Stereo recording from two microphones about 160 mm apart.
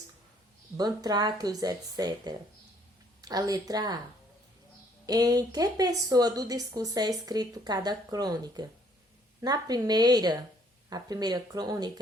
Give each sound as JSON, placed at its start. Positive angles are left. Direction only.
{"t": 0.8, "sound": "a woman's voice", "side_deg": -25}
{"t": 5.0, "sound": "a woman's voice", "side_deg": -20}